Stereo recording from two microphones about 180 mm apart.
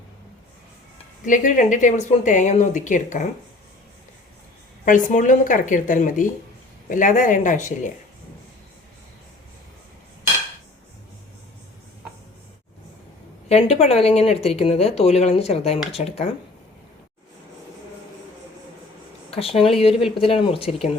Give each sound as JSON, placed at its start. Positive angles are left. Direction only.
{"t": 1.2, "sound": "a woman's voice", "side_deg": 45}
{"t": 4.9, "sound": "a woman's voice", "side_deg": 45}
{"t": 13.5, "sound": "speech", "side_deg": 35}
{"t": 19.3, "sound": "speech", "side_deg": 30}